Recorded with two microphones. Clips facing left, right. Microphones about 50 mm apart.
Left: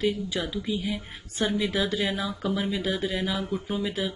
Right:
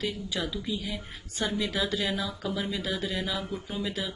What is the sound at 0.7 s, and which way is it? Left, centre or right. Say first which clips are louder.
Speech: left 4 dB; left.